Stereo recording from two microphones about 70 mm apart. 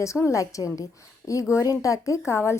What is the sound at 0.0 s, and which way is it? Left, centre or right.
Speech, left.